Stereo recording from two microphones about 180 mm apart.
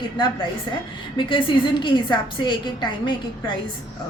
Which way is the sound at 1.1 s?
25° left (ahead or behind).